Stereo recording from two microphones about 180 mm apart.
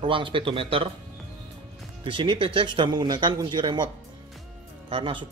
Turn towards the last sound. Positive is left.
turn(degrees=-30)  # may be behind; listen again after turning